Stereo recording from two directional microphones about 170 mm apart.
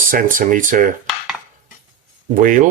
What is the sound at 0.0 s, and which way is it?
Speech, 55° right (ahead or behind).